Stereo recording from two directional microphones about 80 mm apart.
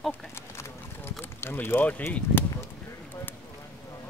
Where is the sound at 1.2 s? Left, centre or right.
Left.